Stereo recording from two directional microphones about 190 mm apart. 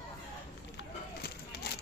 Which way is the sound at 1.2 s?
55° left (ahead or behind).